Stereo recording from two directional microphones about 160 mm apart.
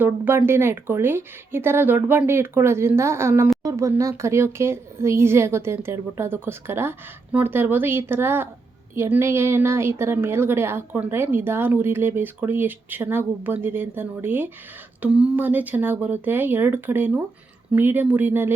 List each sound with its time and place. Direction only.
0.0 s a woman's voice: 15° right (ahead or behind)